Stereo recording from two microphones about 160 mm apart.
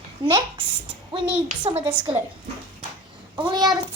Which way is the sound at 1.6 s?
30° right (ahead or behind).